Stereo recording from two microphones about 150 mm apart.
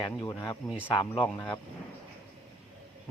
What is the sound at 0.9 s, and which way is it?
Speech, 35° left (ahead or behind).